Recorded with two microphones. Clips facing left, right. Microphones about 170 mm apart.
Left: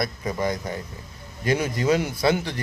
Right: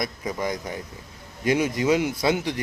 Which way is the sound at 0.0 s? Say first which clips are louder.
Left 2 dB; 15° right (ahead or behind).